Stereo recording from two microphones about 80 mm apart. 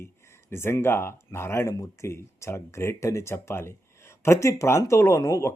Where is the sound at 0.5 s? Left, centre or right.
Left.